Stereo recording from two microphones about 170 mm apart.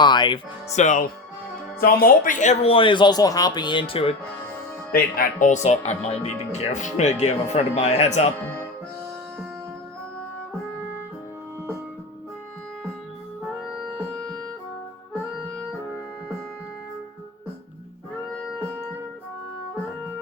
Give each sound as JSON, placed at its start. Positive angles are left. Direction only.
{"t": 0.0, "sound": "speech", "side_deg": 25}
{"t": 0.7, "sound": "speech", "side_deg": 45}
{"t": 1.8, "sound": "speech", "side_deg": 60}
{"t": 4.9, "sound": "speech", "side_deg": 60}